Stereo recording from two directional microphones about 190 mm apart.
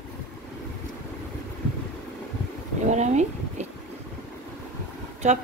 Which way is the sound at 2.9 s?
35° right (ahead or behind).